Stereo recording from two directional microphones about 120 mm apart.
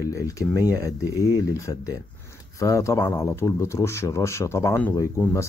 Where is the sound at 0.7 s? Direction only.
25° left (ahead or behind).